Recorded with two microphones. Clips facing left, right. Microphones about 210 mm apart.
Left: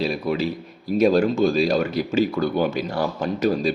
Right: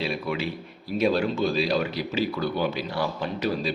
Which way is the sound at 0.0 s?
40° left (ahead or behind).